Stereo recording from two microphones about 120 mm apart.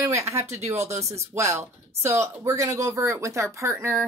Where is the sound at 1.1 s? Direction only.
25° right (ahead or behind).